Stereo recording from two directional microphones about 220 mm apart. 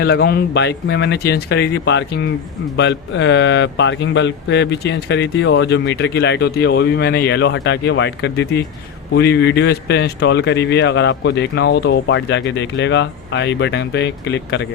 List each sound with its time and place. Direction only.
0.0 s speech: 45° left (ahead or behind)